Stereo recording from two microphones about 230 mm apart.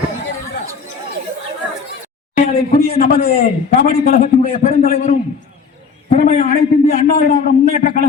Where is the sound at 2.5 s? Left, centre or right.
Left.